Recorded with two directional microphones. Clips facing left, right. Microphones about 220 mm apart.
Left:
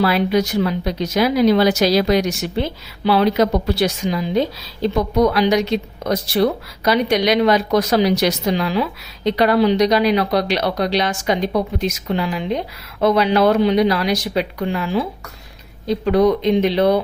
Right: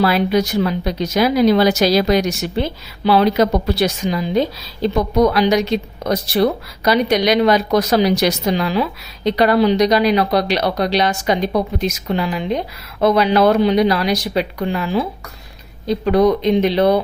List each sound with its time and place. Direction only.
0.0 s speech: 40° right (ahead or behind)
16.0 s speech: 40° right (ahead or behind)